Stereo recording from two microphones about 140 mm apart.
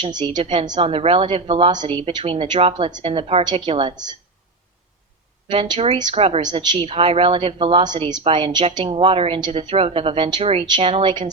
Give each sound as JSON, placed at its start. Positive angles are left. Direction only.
{"t": 0.0, "sound": "a woman's voice", "side_deg": -30}
{"t": 5.5, "sound": "a woman's voice", "side_deg": -35}
{"t": 6.4, "sound": "a woman's voice", "side_deg": -30}
{"t": 6.8, "sound": "a woman's voice", "side_deg": -45}